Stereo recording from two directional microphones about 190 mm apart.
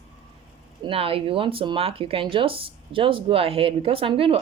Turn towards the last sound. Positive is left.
turn(degrees=-30)  # may be behind; listen again after turning